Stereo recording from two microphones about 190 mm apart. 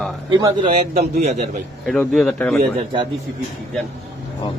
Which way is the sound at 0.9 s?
35° right (ahead or behind).